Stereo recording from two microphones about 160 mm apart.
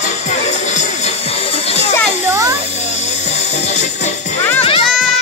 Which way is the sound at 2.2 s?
20° right (ahead or behind).